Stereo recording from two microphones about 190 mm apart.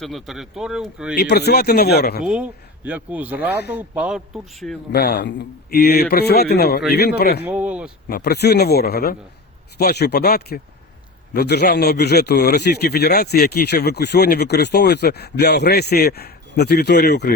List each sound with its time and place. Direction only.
0.0 s speech: centre (ahead or behind)
1.1 s a man's voice: 60° left (ahead or behind)
2.2 s speech: 5° right (ahead or behind)
4.9 s a man's voice: 55° left (ahead or behind)
7.5 s a sound: 5° right (ahead or behind)
8.1 s a man's voice: 60° left (ahead or behind)